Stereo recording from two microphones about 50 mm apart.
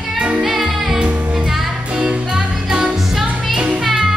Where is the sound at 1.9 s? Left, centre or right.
Centre.